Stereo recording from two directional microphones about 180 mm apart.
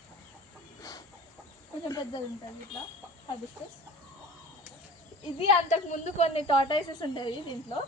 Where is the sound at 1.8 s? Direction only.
20° left (ahead or behind).